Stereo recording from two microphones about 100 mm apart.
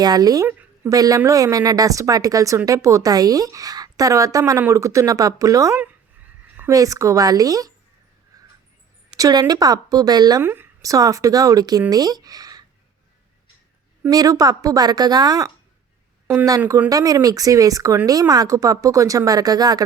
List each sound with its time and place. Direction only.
0.0 s speech: 40° right (ahead or behind)
9.1 s speech: 40° right (ahead or behind)
10.4 s speech: 20° right (ahead or behind)
10.8 s speech: 35° right (ahead or behind)
14.1 s speech: 40° right (ahead or behind)
16.2 s speech: 15° right (ahead or behind)
16.9 s speech: 35° right (ahead or behind)